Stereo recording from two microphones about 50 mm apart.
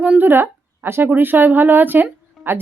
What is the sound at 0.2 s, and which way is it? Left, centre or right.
Speech, right.